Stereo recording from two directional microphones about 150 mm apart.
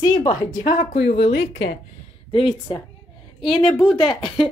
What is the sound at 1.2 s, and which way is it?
Speech, 40° left (ahead or behind).